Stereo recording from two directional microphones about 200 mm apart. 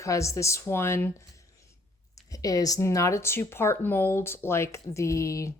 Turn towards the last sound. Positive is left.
turn(degrees=15)  # may be behind; listen again after turning